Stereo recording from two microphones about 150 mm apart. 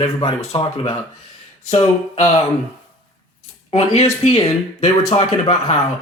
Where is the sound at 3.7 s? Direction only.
45° left (ahead or behind).